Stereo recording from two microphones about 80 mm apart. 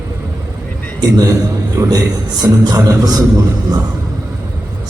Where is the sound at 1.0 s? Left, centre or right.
Right.